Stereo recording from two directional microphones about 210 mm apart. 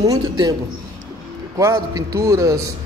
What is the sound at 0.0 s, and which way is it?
Speech, 20° right (ahead or behind).